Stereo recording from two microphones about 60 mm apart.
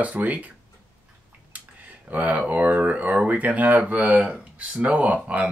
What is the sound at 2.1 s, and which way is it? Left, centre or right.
Speech, right.